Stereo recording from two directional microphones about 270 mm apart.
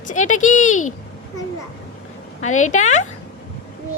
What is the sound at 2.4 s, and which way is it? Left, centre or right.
Speech, left.